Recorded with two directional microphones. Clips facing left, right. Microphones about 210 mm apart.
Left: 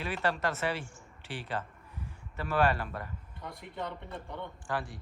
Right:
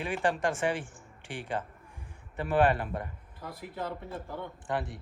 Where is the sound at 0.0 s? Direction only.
15° right (ahead or behind).